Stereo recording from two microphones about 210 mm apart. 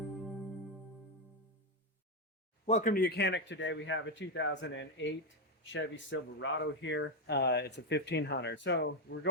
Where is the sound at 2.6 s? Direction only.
35° left (ahead or behind).